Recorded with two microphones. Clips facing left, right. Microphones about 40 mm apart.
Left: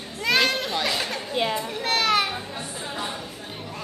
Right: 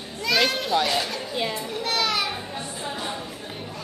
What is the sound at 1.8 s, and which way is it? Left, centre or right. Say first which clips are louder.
Children playing: left 3 dB; left.